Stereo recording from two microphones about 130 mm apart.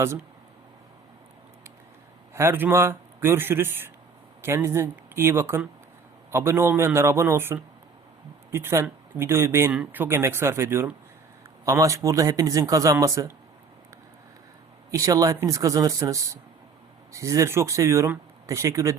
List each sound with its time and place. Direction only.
2.3 s a man's voice: 20° right (ahead or behind)
14.8 s speech: 25° right (ahead or behind)